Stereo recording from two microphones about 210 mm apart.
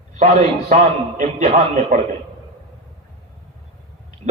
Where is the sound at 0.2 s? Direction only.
30° right (ahead or behind).